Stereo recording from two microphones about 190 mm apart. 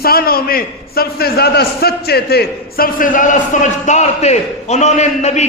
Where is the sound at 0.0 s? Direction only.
50° left (ahead or behind).